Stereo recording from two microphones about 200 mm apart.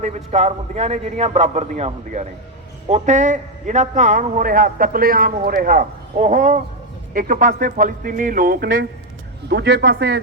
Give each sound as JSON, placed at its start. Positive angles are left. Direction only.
{"t": 0.0, "sound": "a man's voice", "side_deg": -35}